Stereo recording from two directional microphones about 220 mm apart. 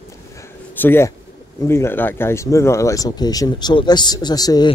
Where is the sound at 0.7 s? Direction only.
10° left (ahead or behind).